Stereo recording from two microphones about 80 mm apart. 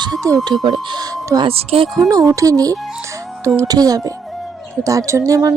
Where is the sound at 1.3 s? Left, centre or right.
Right.